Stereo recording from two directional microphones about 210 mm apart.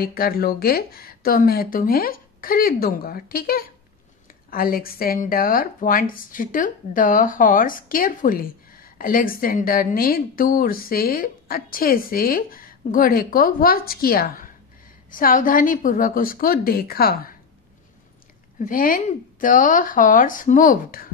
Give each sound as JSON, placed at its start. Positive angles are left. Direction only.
{"t": 0.0, "sound": "speech", "side_deg": 45}
{"t": 18.6, "sound": "speech", "side_deg": 40}